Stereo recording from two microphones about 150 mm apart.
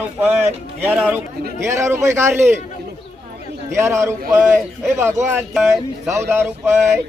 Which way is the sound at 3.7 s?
20° right (ahead or behind).